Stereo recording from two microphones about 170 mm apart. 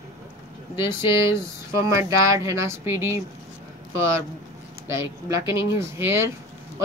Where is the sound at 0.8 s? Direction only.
15° right (ahead or behind).